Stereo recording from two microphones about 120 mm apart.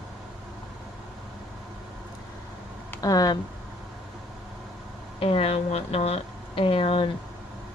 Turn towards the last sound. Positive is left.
turn(degrees=50)  # may be behind; listen again after turning